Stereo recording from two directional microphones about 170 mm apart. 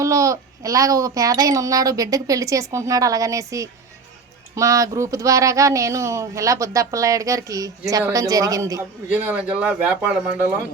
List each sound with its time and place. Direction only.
0.0 s speech: 20° right (ahead or behind)